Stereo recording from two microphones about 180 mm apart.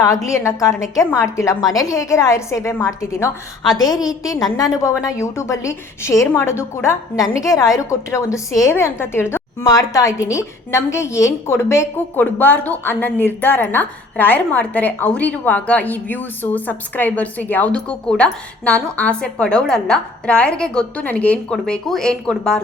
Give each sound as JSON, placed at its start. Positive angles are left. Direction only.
{"t": 0.3, "sound": "a woman's voice", "side_deg": 15}